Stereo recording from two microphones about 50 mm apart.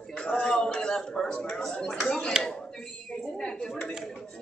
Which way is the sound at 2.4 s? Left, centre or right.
Centre.